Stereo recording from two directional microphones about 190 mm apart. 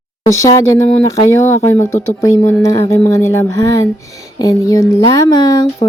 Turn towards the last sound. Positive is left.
turn(degrees=20)  # may be behind; listen again after turning